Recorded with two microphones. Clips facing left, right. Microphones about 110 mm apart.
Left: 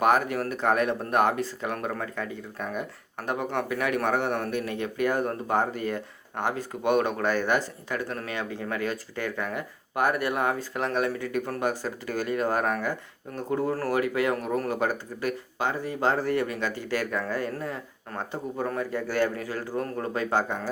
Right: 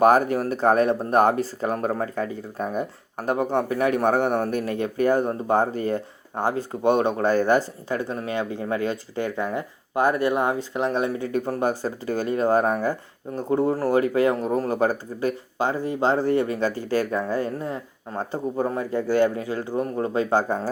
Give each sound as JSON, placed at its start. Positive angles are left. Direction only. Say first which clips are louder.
{"t": 0.0, "sound": "speech", "louder": "right 6 dB", "side_deg": -35}
{"t": 20.5, "sound": "speech", "louder": "right 6 dB", "side_deg": -40}